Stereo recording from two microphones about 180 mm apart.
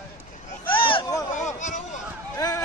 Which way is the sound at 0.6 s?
30° left (ahead or behind).